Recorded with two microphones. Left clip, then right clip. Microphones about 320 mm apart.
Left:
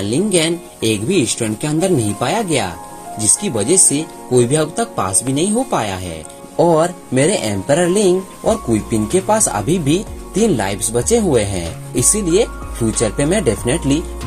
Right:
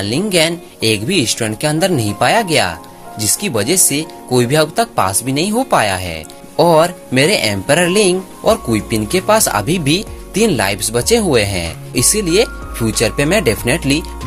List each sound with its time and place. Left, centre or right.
0.0 s speech: right
1.2 s music: right
3.2 s speech: right
4.4 s music: right
12.9 s speech: right